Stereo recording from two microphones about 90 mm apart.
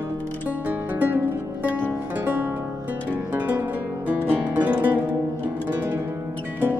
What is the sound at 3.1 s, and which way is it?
Music, 20° right (ahead or behind).